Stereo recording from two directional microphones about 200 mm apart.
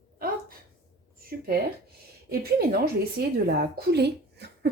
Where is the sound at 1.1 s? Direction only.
50° right (ahead or behind).